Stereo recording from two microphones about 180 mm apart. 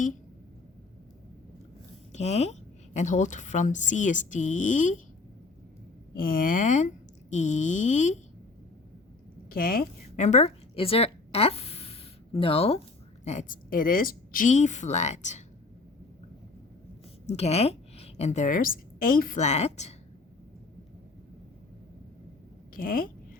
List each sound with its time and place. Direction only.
2.1 s a woman's voice: 40° left (ahead or behind)
6.1 s a woman's voice: 50° left (ahead or behind)
9.5 s a woman's voice: 50° left (ahead or behind)
17.2 s a woman's voice: 35° left (ahead or behind)
22.7 s speech: 50° left (ahead or behind)